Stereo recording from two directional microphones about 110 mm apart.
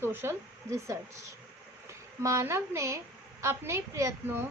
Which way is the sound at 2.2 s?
25° right (ahead or behind).